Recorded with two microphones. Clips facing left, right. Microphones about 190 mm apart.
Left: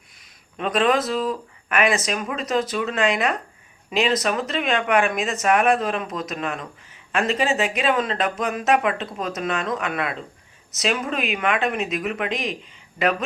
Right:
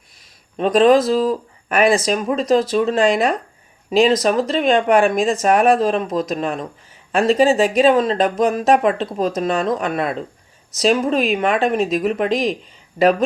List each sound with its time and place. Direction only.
0.5 s speech: 35° right (ahead or behind)